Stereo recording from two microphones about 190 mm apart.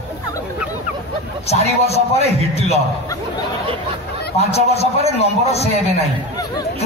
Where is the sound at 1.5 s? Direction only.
35° left (ahead or behind).